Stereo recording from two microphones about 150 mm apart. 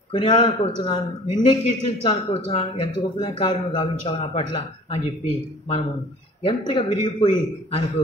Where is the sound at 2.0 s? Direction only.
40° left (ahead or behind).